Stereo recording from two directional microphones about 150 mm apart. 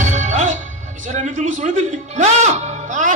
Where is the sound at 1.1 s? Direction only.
55° right (ahead or behind).